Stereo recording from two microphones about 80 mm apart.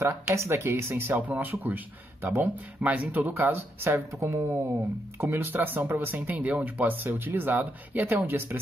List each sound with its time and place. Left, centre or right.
0.3 s speech: right